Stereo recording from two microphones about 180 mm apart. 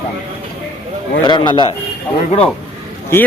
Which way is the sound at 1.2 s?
25° left (ahead or behind).